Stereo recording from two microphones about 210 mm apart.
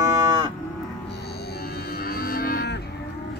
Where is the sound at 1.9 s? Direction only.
45° left (ahead or behind).